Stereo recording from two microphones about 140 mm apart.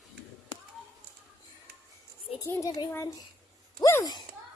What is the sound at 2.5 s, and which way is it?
Speech, 25° left (ahead or behind).